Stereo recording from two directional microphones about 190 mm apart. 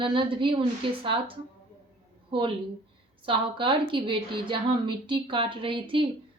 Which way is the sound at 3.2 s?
25° right (ahead or behind).